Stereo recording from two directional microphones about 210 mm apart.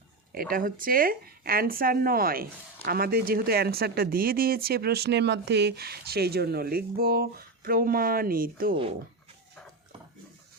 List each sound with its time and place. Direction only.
0.5 s speech: 40° right (ahead or behind)
8.7 s speech: 25° right (ahead or behind)